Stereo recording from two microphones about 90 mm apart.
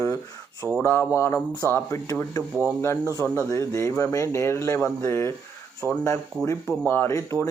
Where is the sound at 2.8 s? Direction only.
30° left (ahead or behind).